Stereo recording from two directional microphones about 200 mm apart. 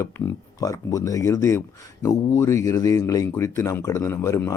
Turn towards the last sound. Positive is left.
turn(degrees=15)  # may be behind; listen again after turning